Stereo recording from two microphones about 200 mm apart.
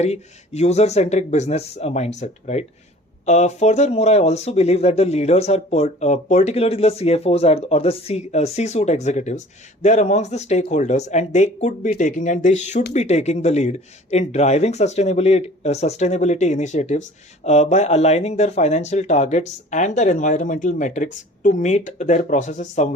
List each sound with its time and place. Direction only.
0.0 s speech: 35° left (ahead or behind)